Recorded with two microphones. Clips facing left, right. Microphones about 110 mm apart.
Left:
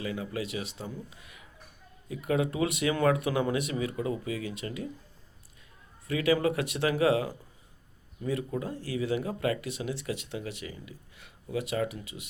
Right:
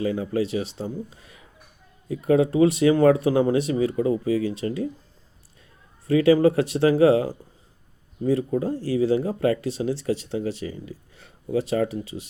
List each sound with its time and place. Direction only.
0.0 s speech: 35° right (ahead or behind)
6.1 s speech: 35° right (ahead or behind)